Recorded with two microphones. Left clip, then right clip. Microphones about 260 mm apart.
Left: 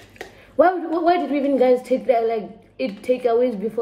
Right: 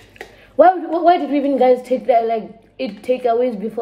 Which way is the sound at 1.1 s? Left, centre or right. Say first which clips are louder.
Right 4 dB; centre.